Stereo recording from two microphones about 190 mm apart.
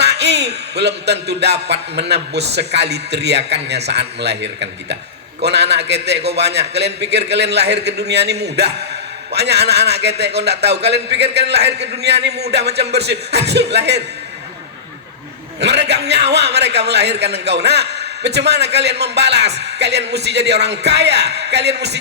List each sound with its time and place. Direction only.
0.0 s a man's voice: 60° right (ahead or behind)
15.6 s a man's voice: 60° right (ahead or behind)